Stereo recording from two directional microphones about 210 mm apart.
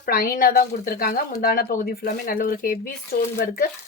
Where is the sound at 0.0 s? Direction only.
45° left (ahead or behind).